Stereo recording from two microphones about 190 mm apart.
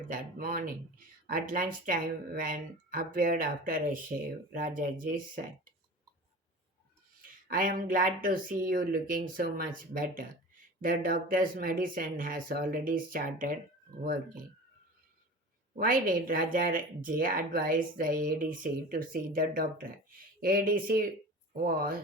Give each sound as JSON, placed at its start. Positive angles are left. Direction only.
{"t": 0.1, "sound": "speech", "side_deg": -45}
{"t": 7.4, "sound": "speech", "side_deg": -45}
{"t": 15.7, "sound": "speech", "side_deg": -45}